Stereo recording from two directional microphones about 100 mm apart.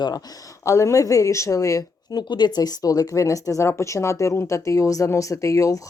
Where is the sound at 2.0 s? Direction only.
45° left (ahead or behind).